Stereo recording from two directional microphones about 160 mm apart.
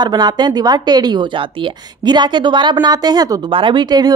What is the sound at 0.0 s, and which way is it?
A woman's voice, 25° right (ahead or behind).